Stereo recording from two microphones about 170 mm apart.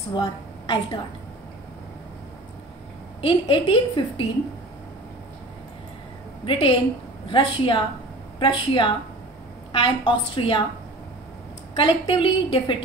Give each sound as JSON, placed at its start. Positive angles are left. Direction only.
{"t": 0.1, "sound": "a woman's voice", "side_deg": 25}
{"t": 3.2, "sound": "a woman's voice", "side_deg": 30}
{"t": 6.4, "sound": "a woman's voice", "side_deg": 30}
{"t": 11.7, "sound": "a woman's voice", "side_deg": 30}